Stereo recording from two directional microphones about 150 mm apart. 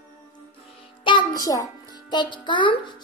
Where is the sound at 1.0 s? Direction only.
30° left (ahead or behind).